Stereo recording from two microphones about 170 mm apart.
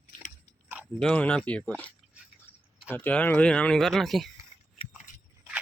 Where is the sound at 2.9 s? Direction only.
10° left (ahead or behind).